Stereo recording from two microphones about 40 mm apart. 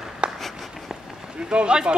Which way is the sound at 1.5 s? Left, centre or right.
Right.